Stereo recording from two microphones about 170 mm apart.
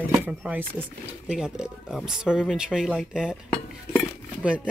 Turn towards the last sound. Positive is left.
turn(degrees=-5)  # may be behind; listen again after turning